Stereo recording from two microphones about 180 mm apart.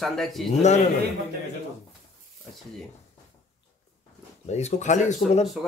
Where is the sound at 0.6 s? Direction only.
40° left (ahead or behind).